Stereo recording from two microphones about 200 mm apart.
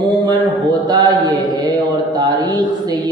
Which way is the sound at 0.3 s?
20° right (ahead or behind).